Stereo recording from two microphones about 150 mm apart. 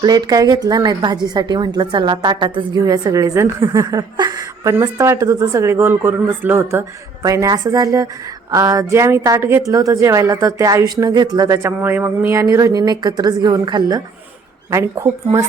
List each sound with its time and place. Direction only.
0.0 s a woman's voice: 25° right (ahead or behind)